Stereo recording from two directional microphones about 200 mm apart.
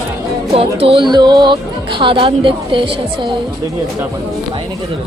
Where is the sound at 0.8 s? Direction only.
25° right (ahead or behind).